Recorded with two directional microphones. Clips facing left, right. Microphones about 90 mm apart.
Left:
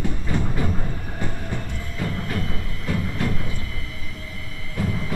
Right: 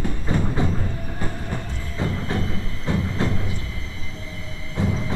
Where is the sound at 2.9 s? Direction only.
25° right (ahead or behind).